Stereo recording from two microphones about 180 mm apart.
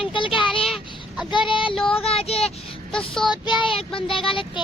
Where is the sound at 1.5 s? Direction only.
30° left (ahead or behind).